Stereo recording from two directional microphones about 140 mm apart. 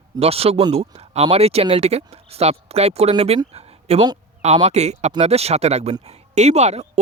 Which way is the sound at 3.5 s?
50° right (ahead or behind).